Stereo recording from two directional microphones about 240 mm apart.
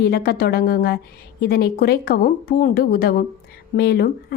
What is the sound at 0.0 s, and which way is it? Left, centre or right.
A woman's voice, left.